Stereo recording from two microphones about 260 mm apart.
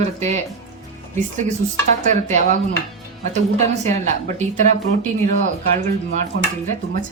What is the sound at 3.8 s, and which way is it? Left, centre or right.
Speech, right.